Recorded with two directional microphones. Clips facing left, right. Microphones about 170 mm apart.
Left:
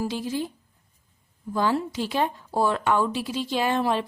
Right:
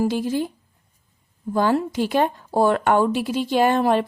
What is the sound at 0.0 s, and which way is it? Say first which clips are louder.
Speech: right 6 dB; 50° right (ahead or behind).